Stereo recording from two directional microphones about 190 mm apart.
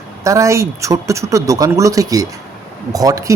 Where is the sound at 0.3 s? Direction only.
15° right (ahead or behind).